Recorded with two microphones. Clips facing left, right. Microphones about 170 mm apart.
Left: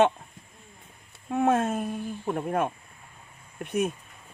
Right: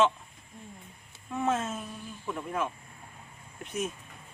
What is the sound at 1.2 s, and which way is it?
Speech, 60° left (ahead or behind).